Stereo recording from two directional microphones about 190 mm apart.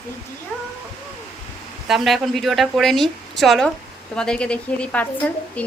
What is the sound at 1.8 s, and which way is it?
A woman's voice, centre (ahead or behind).